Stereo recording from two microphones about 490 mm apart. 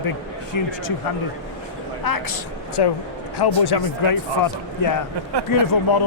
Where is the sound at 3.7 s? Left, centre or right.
Left.